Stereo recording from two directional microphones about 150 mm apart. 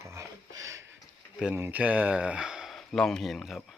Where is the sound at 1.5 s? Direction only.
15° right (ahead or behind).